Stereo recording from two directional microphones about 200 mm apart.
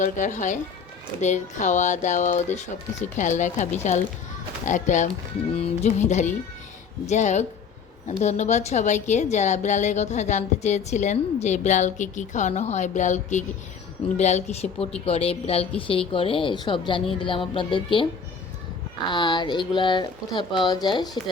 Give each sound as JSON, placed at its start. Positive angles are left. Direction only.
{"t": 0.0, "sound": "a woman's voice", "side_deg": 40}
{"t": 19.1, "sound": "speech", "side_deg": 20}